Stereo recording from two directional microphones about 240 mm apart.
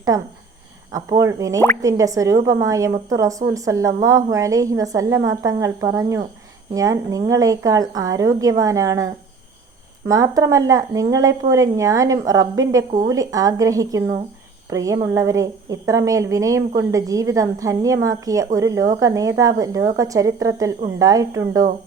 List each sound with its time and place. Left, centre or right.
0.1 s a woman's voice: centre
10.1 s a woman's voice: centre